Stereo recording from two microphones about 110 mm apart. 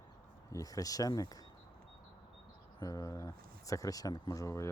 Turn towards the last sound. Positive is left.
turn(degrees=30)  # may be behind; listen again after turning